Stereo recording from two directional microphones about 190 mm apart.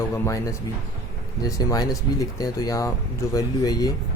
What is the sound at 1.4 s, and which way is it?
Speech, 20° left (ahead or behind).